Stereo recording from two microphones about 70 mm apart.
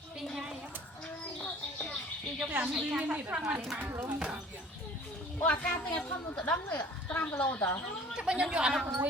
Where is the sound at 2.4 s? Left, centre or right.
Right.